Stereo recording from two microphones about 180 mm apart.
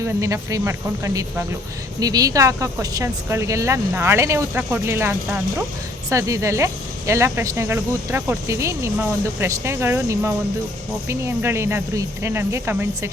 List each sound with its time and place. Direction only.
0.0 s speech: 20° right (ahead or behind)